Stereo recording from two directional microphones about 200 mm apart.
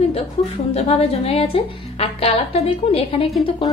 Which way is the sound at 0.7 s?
30° left (ahead or behind).